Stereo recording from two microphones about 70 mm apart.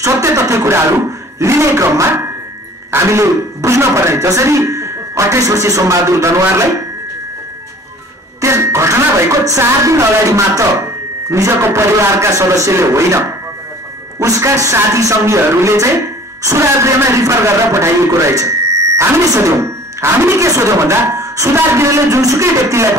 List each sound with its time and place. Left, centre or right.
0.0 s a man's voice: right
8.4 s music: right
9.6 s speech: right
14.2 s a man's voice: right